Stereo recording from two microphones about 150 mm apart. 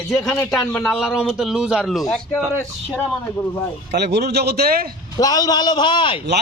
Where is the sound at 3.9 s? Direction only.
90° right.